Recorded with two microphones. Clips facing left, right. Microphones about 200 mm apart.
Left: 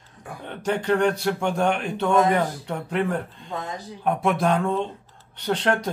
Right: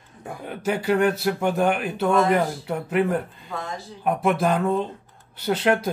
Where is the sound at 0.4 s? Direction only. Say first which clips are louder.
Even; 5° right (ahead or behind).